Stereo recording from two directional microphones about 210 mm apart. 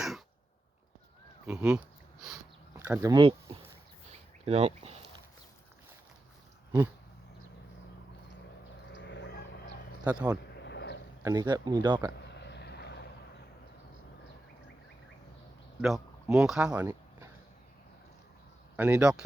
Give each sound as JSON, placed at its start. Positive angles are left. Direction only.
{"t": 1.5, "sound": "speech", "side_deg": -5}
{"t": 8.9, "sound": "chicken", "side_deg": 55}
{"t": 10.0, "sound": "speech", "side_deg": -5}
{"t": 10.6, "sound": "a sound", "side_deg": 55}
{"t": 11.2, "sound": "speech", "side_deg": -15}
{"t": 12.1, "sound": "a sound", "side_deg": 55}
{"t": 15.8, "sound": "speech", "side_deg": -5}
{"t": 18.8, "sound": "speech", "side_deg": -5}